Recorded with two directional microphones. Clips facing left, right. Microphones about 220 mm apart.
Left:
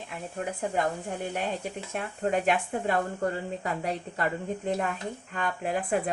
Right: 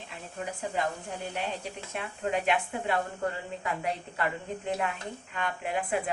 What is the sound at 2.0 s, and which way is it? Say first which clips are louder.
Speech: left 3 dB; 45° left (ahead or behind).